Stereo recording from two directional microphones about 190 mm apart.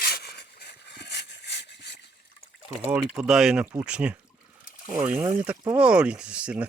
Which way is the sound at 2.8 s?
5° right (ahead or behind).